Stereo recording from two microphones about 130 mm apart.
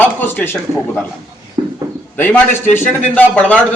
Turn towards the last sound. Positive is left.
turn(degrees=10)  # may be behind; listen again after turning